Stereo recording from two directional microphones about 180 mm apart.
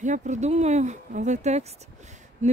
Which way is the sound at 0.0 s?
40° right (ahead or behind).